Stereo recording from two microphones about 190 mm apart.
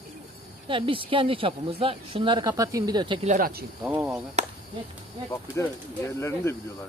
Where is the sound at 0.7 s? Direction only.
25° right (ahead or behind).